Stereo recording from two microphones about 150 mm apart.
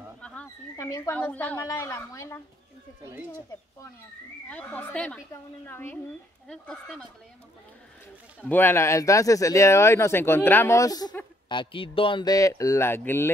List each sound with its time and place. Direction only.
0.2 s a sound: 5° left (ahead or behind)
0.7 s speech: 20° left (ahead or behind)
4.5 s speech: 10° left (ahead or behind)
8.4 s speech: 15° left (ahead or behind)